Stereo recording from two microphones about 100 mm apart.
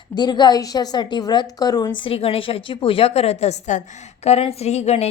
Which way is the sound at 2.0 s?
75° left (ahead or behind).